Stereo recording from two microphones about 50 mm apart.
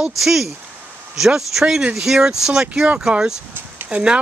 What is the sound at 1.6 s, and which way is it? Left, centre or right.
Speech, centre.